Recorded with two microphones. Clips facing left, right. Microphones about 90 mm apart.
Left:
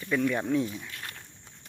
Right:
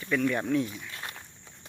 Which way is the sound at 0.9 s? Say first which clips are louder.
Right 2 dB; 20° right (ahead or behind).